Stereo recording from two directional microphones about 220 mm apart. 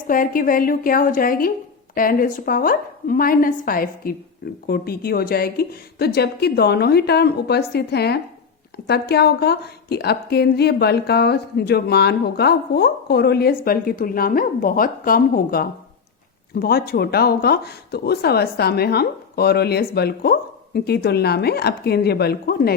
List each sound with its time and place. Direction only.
0.1 s a woman's voice: 40° left (ahead or behind)